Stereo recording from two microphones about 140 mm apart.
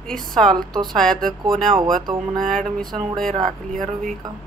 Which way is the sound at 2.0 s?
30° right (ahead or behind).